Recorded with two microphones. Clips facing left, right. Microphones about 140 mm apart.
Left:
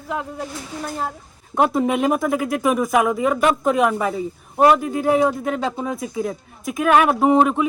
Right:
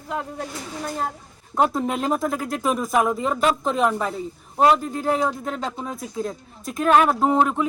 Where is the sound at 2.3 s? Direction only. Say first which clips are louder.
Left 5 dB; 75° left (ahead or behind).